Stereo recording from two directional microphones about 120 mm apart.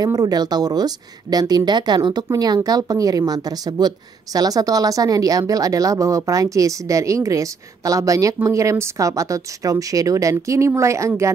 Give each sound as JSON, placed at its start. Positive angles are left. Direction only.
{"t": 0.0, "sound": "a woman's voice", "side_deg": -30}